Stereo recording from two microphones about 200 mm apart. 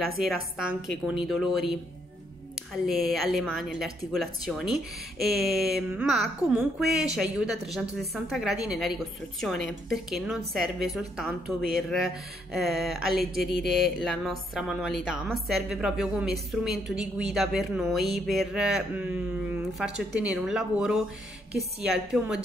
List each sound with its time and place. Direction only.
0.0 s speech: centre (ahead or behind)